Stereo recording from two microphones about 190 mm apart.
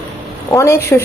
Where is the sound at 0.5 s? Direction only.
15° left (ahead or behind).